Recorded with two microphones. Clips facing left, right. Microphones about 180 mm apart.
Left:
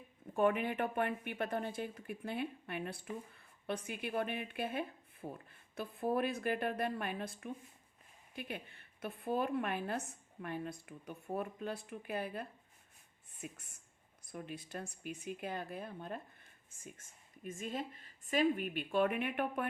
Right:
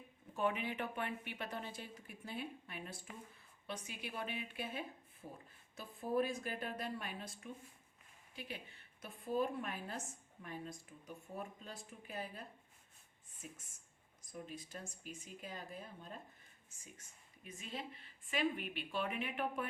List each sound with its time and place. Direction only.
0.3 s speech: 50° left (ahead or behind)